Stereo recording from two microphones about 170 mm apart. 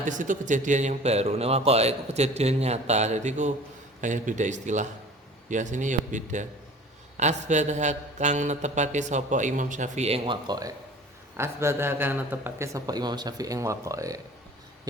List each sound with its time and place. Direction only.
0.0 s a man's voice: 50° right (ahead or behind)
10.4 s speech: 25° right (ahead or behind)